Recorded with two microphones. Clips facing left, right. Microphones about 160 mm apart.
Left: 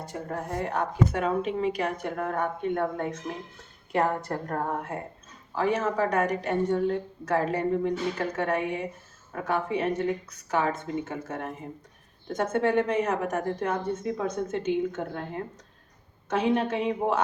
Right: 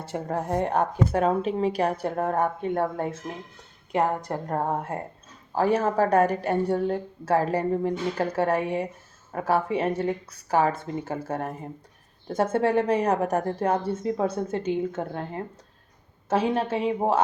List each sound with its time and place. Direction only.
0.0 s a woman's voice: 30° right (ahead or behind)
3.9 s a woman's voice: 15° right (ahead or behind)
16.3 s a woman's voice: 30° right (ahead or behind)